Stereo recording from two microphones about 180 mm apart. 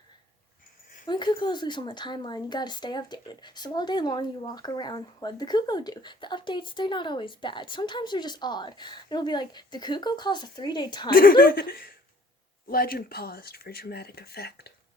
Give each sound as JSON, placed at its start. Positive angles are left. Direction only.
{"t": 1.0, "sound": "a woman's voice", "side_deg": 25}
{"t": 11.1, "sound": "speech", "side_deg": 55}